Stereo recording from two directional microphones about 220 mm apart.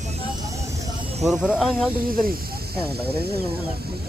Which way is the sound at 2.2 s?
45° right (ahead or behind).